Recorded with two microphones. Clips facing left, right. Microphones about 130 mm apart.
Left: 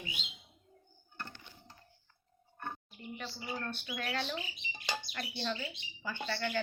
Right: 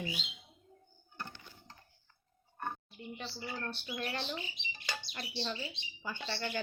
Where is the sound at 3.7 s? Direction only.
25° right (ahead or behind).